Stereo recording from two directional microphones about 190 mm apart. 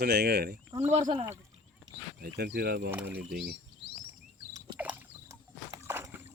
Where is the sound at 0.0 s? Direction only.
60° right (ahead or behind).